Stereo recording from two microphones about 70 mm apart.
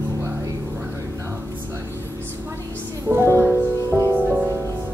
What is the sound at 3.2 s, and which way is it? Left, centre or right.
Music, right.